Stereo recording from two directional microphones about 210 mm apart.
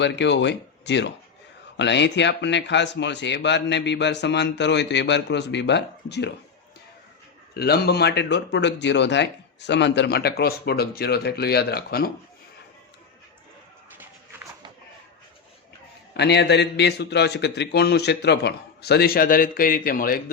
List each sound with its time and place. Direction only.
0.0 s speech: 55° left (ahead or behind)
7.5 s speech: 50° left (ahead or behind)
16.1 s speech: 55° left (ahead or behind)